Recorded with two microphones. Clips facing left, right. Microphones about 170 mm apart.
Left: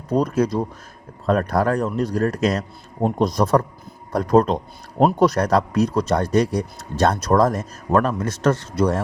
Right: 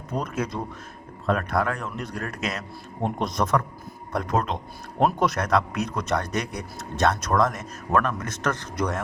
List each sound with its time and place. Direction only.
0.1 s speech: 35° left (ahead or behind)